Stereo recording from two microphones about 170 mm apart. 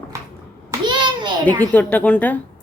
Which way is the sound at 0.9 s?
25° right (ahead or behind).